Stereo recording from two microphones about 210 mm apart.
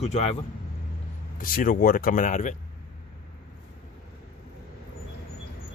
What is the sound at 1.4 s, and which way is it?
Speech, 40° left (ahead or behind).